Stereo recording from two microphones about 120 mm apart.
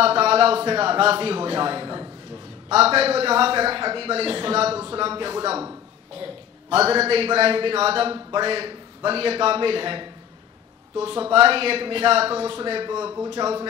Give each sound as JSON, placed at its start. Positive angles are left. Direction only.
{"t": 0.0, "sound": "a man's voice", "side_deg": -55}
{"t": 2.7, "sound": "a man's voice", "side_deg": -55}
{"t": 6.2, "sound": "a man's voice", "side_deg": -55}
{"t": 13.4, "sound": "a man's voice", "side_deg": -30}